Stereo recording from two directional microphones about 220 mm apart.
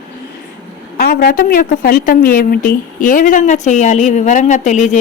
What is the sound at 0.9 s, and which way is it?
A woman's voice, 45° left (ahead or behind).